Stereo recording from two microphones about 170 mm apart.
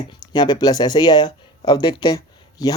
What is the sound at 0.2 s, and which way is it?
Speech, 25° left (ahead or behind).